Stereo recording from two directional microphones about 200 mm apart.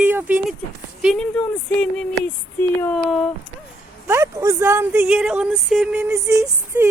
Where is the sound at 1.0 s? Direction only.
5° left (ahead or behind).